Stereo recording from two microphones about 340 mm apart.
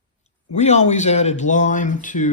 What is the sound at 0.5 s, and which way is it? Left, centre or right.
Speech, centre.